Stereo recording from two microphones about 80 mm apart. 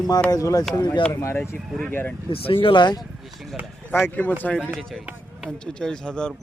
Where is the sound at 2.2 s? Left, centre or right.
Left.